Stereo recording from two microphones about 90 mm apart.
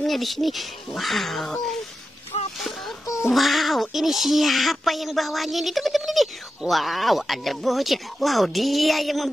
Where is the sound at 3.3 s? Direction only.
Centre (ahead or behind).